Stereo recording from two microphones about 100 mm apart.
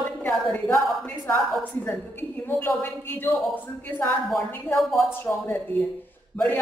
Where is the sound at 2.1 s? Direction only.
20° left (ahead or behind).